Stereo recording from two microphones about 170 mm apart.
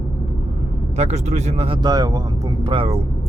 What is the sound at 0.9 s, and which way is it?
Speech, 40° right (ahead or behind).